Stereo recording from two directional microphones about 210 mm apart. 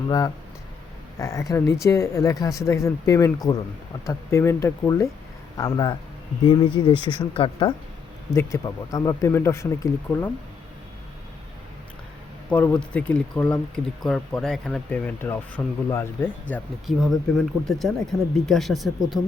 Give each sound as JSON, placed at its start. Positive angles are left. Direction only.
{"t": 1.2, "sound": "speech", "side_deg": 15}
{"t": 8.4, "sound": "speech", "side_deg": 15}
{"t": 12.5, "sound": "speech", "side_deg": 5}